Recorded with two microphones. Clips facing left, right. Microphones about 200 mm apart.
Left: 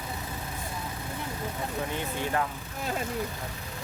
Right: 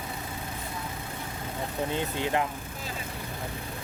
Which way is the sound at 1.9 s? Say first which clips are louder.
Right 2 dB; 20° right (ahead or behind).